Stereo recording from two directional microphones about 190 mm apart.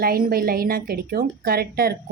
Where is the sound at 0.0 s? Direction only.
50° right (ahead or behind).